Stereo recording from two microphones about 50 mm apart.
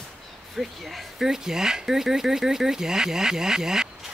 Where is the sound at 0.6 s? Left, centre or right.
Centre.